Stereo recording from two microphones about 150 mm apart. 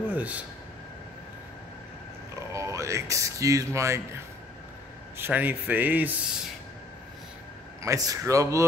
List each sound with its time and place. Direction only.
0.1 s speech: 10° right (ahead or behind)
2.5 s speech: 20° right (ahead or behind)
5.1 s speech: 15° right (ahead or behind)
7.8 s speech: 20° right (ahead or behind)